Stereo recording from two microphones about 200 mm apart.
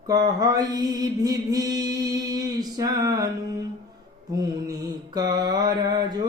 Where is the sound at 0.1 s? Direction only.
20° right (ahead or behind).